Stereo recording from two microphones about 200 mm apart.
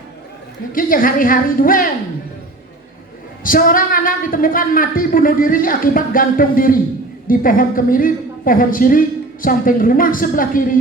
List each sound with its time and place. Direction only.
0.7 s a woman's voice: 45° left (ahead or behind)
3.4 s a woman's voice: 45° left (ahead or behind)